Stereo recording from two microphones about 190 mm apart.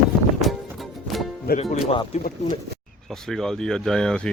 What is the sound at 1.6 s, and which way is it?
Speech, 30° left (ahead or behind).